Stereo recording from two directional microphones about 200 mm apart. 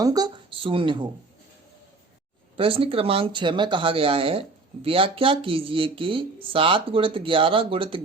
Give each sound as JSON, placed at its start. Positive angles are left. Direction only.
{"t": 0.0, "sound": "speech", "side_deg": -20}
{"t": 2.6, "sound": "speech", "side_deg": -25}